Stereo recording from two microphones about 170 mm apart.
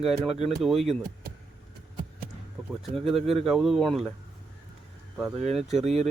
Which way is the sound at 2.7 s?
Centre (ahead or behind).